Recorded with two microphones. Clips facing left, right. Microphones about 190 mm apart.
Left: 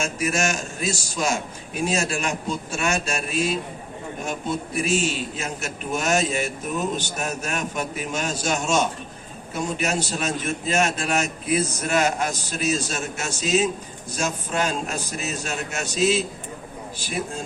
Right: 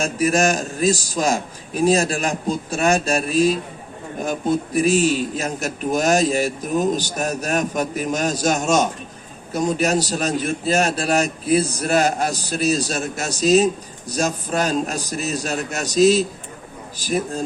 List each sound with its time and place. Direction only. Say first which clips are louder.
0.0 s a man's voice: right 6 dB; 35° right (ahead or behind)